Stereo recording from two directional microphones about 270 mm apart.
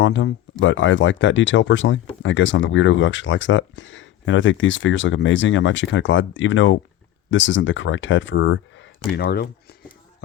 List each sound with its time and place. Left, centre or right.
0.0 s speech: left